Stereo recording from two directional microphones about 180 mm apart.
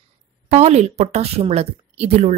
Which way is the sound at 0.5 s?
35° right (ahead or behind).